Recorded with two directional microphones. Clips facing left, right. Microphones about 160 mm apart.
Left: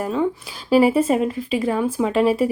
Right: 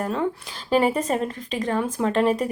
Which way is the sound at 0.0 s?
Centre (ahead or behind).